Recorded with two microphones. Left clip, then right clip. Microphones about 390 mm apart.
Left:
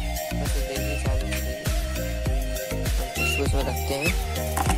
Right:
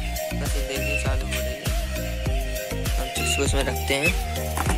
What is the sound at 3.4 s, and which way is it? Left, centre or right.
Music, centre.